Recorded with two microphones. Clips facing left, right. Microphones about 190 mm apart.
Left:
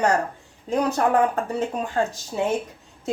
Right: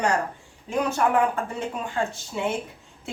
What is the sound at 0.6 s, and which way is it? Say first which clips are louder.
Speech: left 2 dB; 40° left (ahead or behind).